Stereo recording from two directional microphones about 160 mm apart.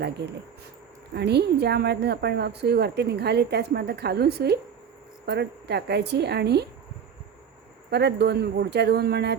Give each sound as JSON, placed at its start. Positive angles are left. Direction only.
{"t": 1.1, "sound": "a woman's voice", "side_deg": -90}
{"t": 7.9, "sound": "a woman's voice", "side_deg": -90}